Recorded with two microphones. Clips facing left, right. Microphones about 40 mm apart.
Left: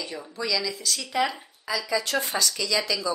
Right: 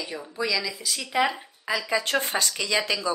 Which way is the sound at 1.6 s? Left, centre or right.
Right.